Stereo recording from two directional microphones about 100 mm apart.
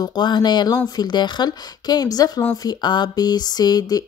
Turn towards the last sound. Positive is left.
turn(degrees=40)  # may be behind; listen again after turning